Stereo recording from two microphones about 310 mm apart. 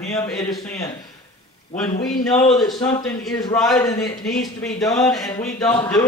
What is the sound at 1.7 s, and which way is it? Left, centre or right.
Speech, left.